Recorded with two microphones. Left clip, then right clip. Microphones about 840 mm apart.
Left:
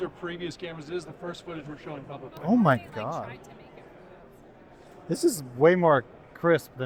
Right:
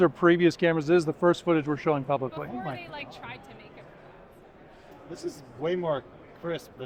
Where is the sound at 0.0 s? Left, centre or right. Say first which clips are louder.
Right 13 dB; right.